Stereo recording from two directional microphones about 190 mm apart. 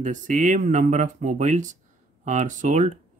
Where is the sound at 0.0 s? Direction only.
40° right (ahead or behind).